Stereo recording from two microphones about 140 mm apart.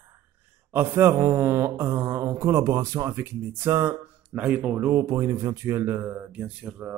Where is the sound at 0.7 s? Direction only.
15° right (ahead or behind).